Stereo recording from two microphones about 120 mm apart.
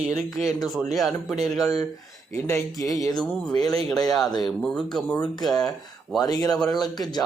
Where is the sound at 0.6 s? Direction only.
Centre (ahead or behind).